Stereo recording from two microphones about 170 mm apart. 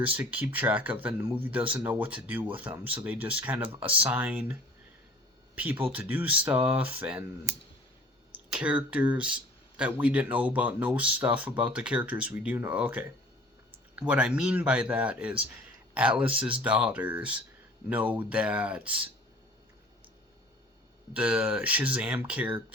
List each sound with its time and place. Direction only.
0.0 s speech: 10° right (ahead or behind)
5.5 s speech: 10° right (ahead or behind)
8.4 s speech: 5° right (ahead or behind)
21.1 s speech: 10° right (ahead or behind)